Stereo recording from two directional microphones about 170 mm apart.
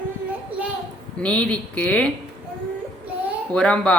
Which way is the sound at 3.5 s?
5° left (ahead or behind).